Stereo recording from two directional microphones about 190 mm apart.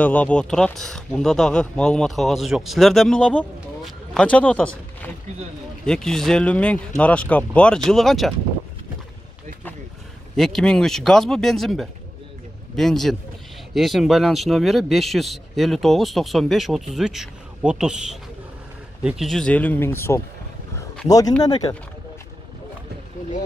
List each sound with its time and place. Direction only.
0.0 s speech: 10° left (ahead or behind)
10.3 s speech: centre (ahead or behind)
21.4 s speech: 20° left (ahead or behind)